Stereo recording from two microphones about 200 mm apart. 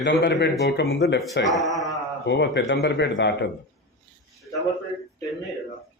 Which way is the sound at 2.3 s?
60° left (ahead or behind).